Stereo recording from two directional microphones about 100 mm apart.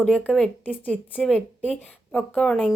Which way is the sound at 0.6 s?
15° left (ahead or behind).